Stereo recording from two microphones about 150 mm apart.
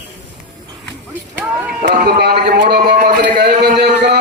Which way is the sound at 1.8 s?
90° right.